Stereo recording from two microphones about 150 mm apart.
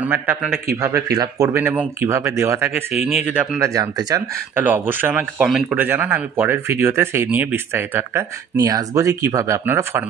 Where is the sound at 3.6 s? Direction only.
25° right (ahead or behind).